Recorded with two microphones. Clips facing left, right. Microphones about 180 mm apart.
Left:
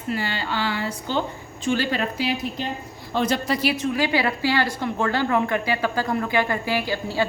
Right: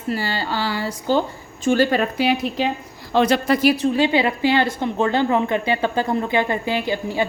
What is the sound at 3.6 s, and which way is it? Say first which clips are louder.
A woman's voice: right 6 dB; 40° right (ahead or behind).